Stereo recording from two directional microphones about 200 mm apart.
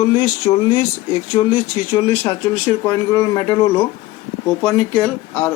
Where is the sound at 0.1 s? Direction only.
25° left (ahead or behind).